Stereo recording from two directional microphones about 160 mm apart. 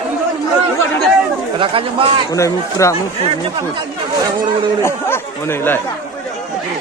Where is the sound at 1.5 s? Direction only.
35° right (ahead or behind).